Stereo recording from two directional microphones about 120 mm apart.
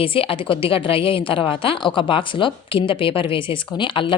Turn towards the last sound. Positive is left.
turn(degrees=45)  # may be behind; listen again after turning